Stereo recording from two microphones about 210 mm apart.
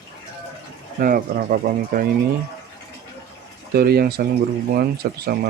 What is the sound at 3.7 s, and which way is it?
Speech, 50° right (ahead or behind).